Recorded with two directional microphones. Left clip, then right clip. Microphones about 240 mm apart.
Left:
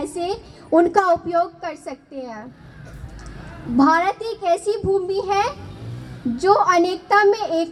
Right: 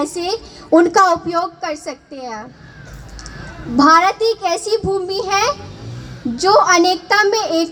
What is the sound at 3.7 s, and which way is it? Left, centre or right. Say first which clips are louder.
A woman's voice: right 6 dB; right.